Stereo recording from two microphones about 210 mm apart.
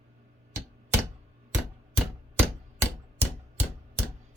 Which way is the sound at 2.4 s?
10° right (ahead or behind).